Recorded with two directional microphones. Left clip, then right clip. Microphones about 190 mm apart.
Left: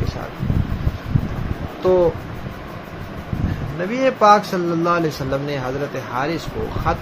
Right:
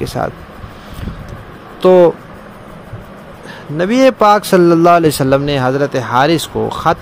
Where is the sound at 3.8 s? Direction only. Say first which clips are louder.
Right 7 dB; 65° right (ahead or behind).